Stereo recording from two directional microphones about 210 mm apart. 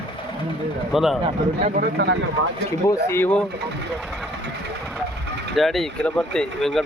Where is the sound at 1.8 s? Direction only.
55° right (ahead or behind).